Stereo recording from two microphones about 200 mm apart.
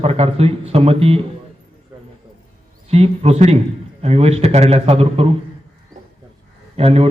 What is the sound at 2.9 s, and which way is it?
A man's voice, 30° right (ahead or behind).